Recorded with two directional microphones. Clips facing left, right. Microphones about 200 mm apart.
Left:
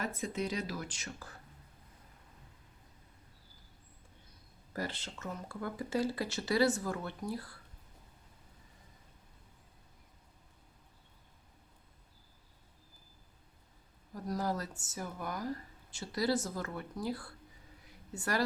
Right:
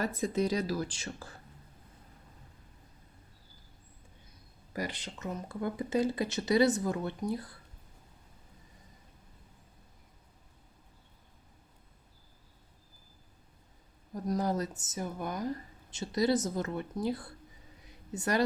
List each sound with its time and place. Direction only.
0.0 s speech: 35° right (ahead or behind)
4.7 s speech: 15° right (ahead or behind)
14.1 s speech: 20° right (ahead or behind)
17.8 s a sound: 20° right (ahead or behind)